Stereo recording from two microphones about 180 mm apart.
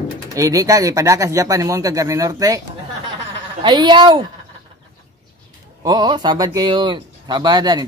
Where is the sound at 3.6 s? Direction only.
25° right (ahead or behind).